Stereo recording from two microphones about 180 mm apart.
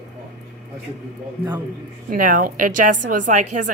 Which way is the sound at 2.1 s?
50° right (ahead or behind).